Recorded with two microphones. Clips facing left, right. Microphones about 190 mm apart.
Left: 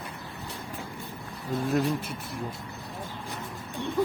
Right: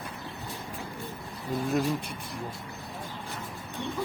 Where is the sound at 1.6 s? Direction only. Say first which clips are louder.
Left 2 dB; centre (ahead or behind).